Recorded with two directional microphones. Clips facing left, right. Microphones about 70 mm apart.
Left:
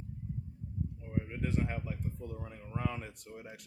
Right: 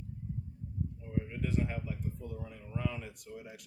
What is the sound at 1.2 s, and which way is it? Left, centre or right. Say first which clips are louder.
Speech: even; left.